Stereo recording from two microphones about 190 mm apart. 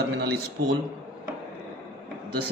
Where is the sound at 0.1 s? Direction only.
60° right (ahead or behind).